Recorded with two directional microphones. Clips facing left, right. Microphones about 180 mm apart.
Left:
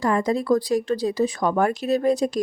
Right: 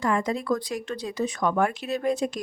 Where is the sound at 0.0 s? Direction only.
35° left (ahead or behind).